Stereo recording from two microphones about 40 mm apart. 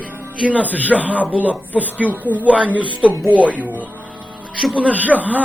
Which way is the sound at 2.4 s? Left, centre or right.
Right.